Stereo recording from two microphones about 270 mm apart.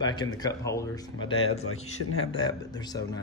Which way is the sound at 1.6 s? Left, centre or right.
Left.